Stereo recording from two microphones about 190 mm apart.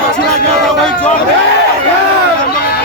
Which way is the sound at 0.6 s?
5° left (ahead or behind).